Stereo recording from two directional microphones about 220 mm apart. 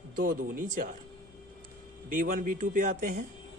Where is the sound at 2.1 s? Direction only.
35° right (ahead or behind).